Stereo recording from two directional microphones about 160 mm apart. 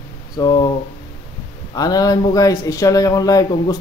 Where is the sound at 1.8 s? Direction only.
25° left (ahead or behind).